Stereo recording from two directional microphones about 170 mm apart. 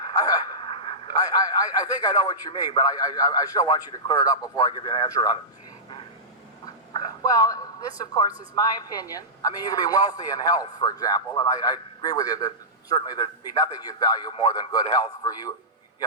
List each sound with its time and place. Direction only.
0.1 s radio: 20° left (ahead or behind)
0.7 s radio: 35° left (ahead or behind)
1.1 s a man's voice: 20° left (ahead or behind)
6.9 s a man's voice: 20° left (ahead or behind)